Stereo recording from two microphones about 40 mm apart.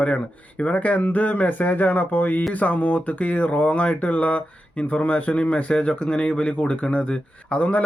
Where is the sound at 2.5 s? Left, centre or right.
Left.